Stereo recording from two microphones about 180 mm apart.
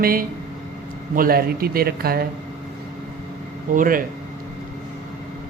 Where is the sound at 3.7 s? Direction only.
50° right (ahead or behind).